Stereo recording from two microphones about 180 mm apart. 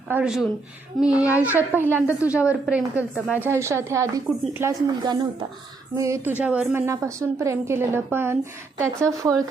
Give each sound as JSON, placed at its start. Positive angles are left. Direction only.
{"t": 0.1, "sound": "speech", "side_deg": -5}
{"t": 3.0, "sound": "a woman's voice", "side_deg": 10}
{"t": 3.4, "sound": "speech", "side_deg": -15}